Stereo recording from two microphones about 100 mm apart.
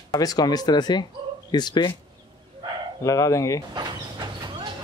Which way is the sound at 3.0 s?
35° left (ahead or behind).